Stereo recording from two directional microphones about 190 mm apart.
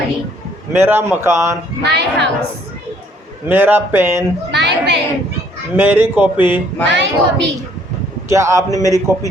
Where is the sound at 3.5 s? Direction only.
10° right (ahead or behind).